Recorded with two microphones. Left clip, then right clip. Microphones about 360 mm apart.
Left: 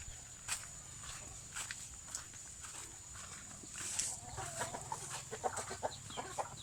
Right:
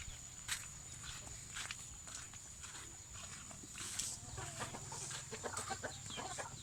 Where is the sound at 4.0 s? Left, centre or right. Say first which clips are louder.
Left 3 dB; left.